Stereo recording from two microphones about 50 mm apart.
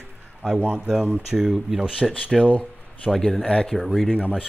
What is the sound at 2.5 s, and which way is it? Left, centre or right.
Speech, left.